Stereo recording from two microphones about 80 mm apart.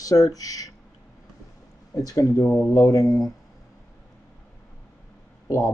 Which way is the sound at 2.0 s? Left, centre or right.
Left.